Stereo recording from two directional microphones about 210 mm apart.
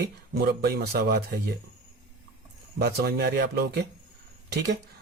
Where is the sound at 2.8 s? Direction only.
50° right (ahead or behind).